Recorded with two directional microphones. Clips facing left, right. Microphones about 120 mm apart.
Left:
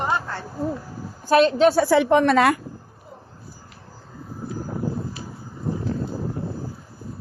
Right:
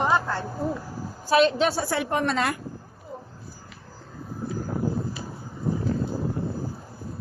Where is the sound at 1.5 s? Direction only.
40° left (ahead or behind).